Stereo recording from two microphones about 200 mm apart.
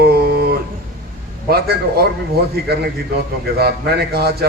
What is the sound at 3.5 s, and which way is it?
Speech, 50° right (ahead or behind).